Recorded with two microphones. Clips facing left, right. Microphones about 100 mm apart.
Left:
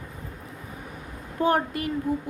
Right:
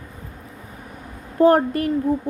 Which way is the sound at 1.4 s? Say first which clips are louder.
Right 8 dB; 40° right (ahead or behind).